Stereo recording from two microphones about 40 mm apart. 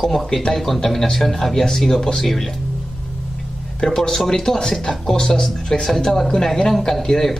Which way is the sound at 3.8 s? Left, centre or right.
Centre.